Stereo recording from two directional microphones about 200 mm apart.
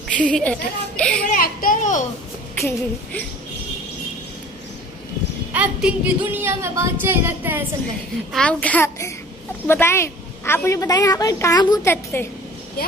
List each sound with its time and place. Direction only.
0.1 s a woman's voice: 5° left (ahead or behind)
1.3 s a child's voice: 45° left (ahead or behind)
2.6 s a woman's voice: 5° left (ahead or behind)
5.5 s speech: 5° right (ahead or behind)
8.3 s a woman's voice: 5° left (ahead or behind)